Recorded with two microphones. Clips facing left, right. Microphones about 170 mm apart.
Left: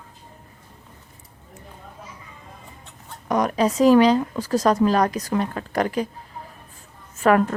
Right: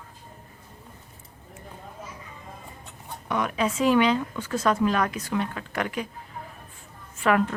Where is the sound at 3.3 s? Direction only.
40° left (ahead or behind).